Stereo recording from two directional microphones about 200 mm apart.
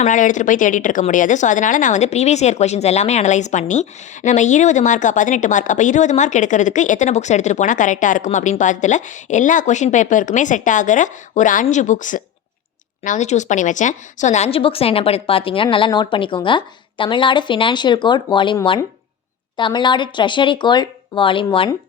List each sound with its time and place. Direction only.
0.0 s a woman's voice: 40° left (ahead or behind)